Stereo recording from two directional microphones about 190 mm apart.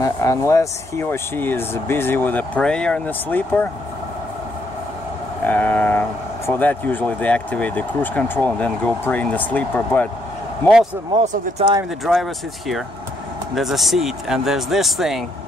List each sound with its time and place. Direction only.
0.0 s speech: 15° left (ahead or behind)
5.5 s speech: 10° left (ahead or behind)
11.1 s speech: 20° right (ahead or behind)
12.0 s speech: centre (ahead or behind)